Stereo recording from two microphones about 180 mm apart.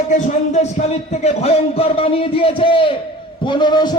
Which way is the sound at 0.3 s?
40° left (ahead or behind).